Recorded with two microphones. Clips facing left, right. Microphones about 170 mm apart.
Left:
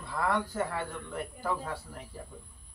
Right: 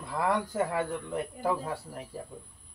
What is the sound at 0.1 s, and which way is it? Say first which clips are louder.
Speech: right 2 dB; 25° right (ahead or behind).